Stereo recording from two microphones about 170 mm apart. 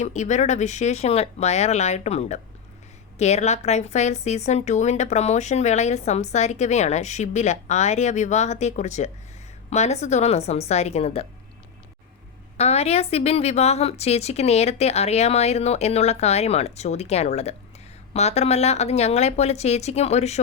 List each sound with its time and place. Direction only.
0.0 s a woman's voice: 45° left (ahead or behind)
12.5 s a woman's voice: 40° left (ahead or behind)